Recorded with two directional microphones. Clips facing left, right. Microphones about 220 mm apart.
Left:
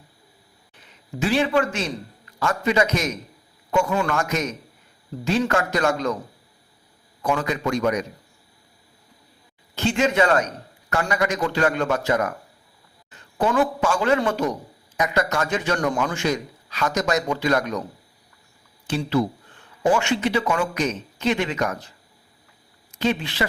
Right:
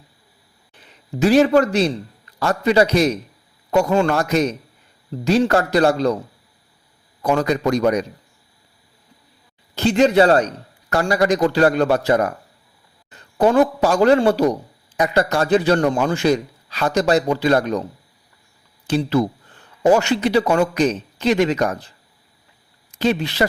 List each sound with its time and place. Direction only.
1.2 s a man's voice: 40° right (ahead or behind)
7.2 s a man's voice: 40° right (ahead or behind)
9.7 s a man's voice: 35° right (ahead or behind)
18.9 s a man's voice: 40° right (ahead or behind)
23.0 s a man's voice: 40° right (ahead or behind)